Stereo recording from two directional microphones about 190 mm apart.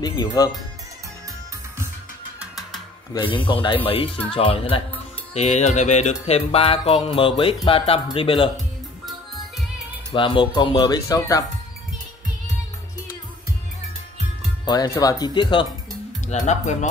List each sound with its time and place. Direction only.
0.0 s speech: 20° left (ahead or behind)
3.4 s speech: 25° left (ahead or behind)
5.3 s music: 35° left (ahead or behind)
10.1 s speech: 25° left (ahead or behind)
14.6 s speech: 20° left (ahead or behind)
16.3 s music: 35° left (ahead or behind)